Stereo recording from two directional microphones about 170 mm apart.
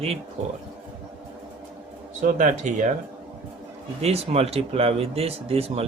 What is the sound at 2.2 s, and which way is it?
Speech, 50° right (ahead or behind).